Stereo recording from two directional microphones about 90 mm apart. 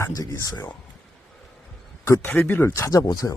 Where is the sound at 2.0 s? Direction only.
35° left (ahead or behind).